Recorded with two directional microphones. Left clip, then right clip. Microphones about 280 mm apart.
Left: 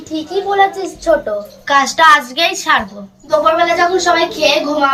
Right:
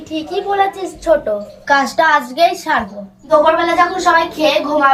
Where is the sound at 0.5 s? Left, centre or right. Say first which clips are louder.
Left 3 dB; centre.